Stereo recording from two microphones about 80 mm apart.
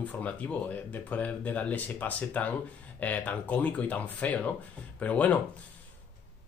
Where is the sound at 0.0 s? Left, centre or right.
Centre.